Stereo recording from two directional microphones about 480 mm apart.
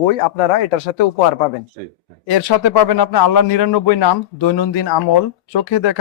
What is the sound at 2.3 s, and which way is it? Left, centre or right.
Speech, left.